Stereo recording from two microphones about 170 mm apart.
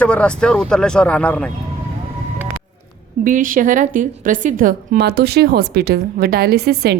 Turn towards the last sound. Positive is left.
turn(degrees=-70)  # may be behind; listen again after turning